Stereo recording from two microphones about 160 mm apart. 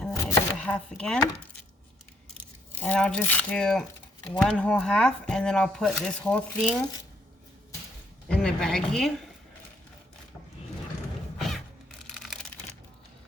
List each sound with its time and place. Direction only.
0.1 s chopping: 20° left (ahead or behind)
0.6 s speech: 5° left (ahead or behind)
2.7 s speech: 5° left (ahead or behind)
8.3 s a woman's voice: 5° left (ahead or behind)
11.3 s music: centre (ahead or behind)